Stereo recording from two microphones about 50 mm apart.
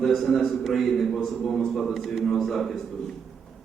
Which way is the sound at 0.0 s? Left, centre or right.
Centre.